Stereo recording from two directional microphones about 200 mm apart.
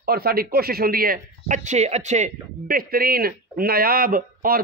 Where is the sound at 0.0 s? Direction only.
50° right (ahead or behind).